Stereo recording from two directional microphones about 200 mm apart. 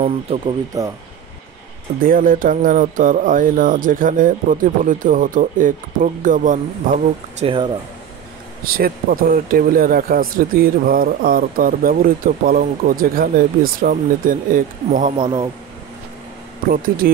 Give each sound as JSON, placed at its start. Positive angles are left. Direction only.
{"t": 0.0, "sound": "speech", "side_deg": -25}
{"t": 2.0, "sound": "speech", "side_deg": -45}
{"t": 7.4, "sound": "speech", "side_deg": -25}
{"t": 8.7, "sound": "speech", "side_deg": -45}
{"t": 15.1, "sound": "speech", "side_deg": -20}
{"t": 16.7, "sound": "speech", "side_deg": -45}